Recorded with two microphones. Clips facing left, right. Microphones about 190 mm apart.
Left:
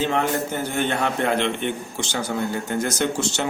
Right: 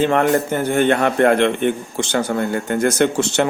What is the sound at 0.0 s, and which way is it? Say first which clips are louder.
A man's voice: right 6 dB; 55° right (ahead or behind).